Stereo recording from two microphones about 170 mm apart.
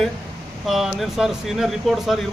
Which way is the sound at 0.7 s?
Centre (ahead or behind).